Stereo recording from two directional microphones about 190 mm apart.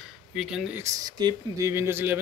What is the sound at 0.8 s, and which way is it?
Speech, 20° right (ahead or behind).